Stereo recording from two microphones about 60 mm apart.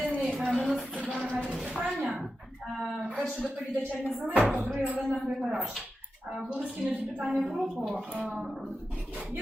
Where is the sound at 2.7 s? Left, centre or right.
Centre.